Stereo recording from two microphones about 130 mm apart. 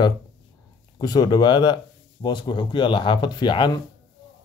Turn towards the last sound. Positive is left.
turn(degrees=35)  # may be behind; listen again after turning